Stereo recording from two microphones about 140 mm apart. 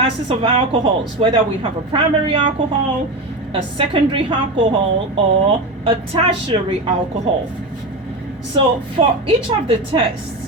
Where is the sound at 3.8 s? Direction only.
35° right (ahead or behind).